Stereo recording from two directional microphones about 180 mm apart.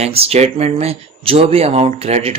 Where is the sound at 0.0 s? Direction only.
35° right (ahead or behind).